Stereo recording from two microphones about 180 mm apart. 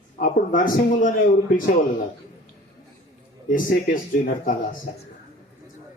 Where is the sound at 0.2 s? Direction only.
50° left (ahead or behind).